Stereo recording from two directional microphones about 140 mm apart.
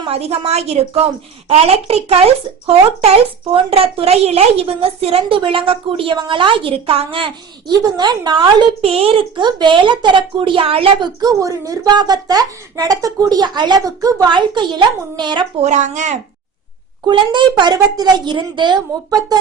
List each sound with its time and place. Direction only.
0.1 s a woman's voice: 45° right (ahead or behind)
3.5 s a woman's voice: 40° right (ahead or behind)
11.2 s speech: 25° right (ahead or behind)
15.6 s speech: 60° right (ahead or behind)
17.1 s a woman's voice: 35° right (ahead or behind)